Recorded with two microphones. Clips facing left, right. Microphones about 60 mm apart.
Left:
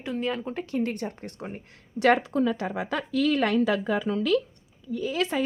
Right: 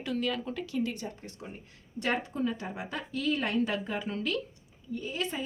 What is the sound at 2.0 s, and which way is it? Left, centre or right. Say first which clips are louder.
A woman's voice: left 9 dB; left.